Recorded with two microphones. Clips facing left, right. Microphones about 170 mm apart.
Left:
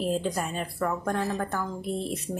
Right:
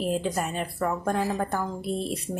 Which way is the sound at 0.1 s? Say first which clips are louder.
Right 1 dB; 5° right (ahead or behind).